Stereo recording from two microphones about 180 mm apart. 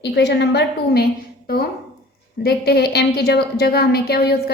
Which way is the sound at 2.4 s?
60° left (ahead or behind).